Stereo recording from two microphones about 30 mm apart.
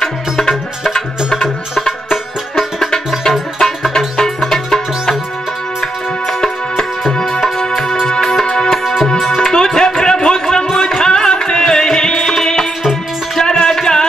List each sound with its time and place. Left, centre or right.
0.9 s music: left
3.3 s music: centre
6.2 s music: centre
8.7 s music: centre
9.4 s music: left